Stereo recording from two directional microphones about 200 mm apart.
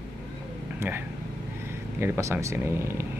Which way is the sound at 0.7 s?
10° right (ahead or behind).